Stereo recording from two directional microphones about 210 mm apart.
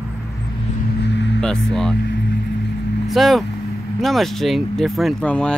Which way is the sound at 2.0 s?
50° left (ahead or behind).